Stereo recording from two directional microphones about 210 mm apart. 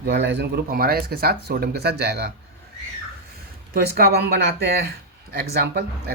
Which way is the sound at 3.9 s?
50° right (ahead or behind).